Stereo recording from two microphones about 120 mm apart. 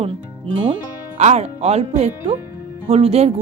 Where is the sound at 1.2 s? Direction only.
65° right (ahead or behind).